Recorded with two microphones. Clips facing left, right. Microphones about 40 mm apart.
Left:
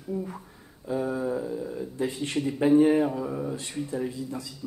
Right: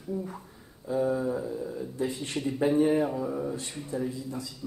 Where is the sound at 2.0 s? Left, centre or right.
Left.